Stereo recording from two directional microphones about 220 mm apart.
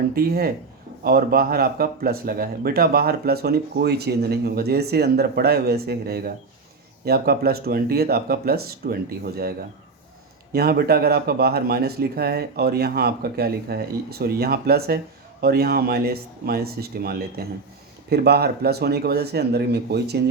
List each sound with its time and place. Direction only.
0.1 s speech: 45° right (ahead or behind)